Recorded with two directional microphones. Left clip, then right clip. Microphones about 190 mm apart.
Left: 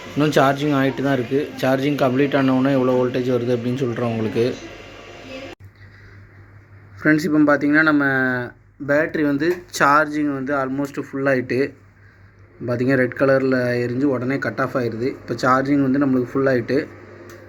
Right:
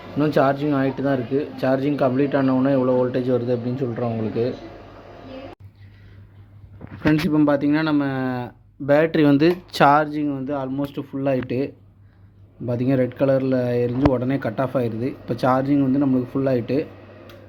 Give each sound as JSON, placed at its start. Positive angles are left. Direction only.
{"t": 0.2, "sound": "speech", "side_deg": 0}
{"t": 7.1, "sound": "speech", "side_deg": -40}
{"t": 8.9, "sound": "speech", "side_deg": -55}
{"t": 15.7, "sound": "speech", "side_deg": -35}